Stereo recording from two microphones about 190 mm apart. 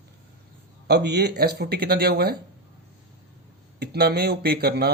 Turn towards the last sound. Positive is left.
turn(degrees=-55)  # may be behind; listen again after turning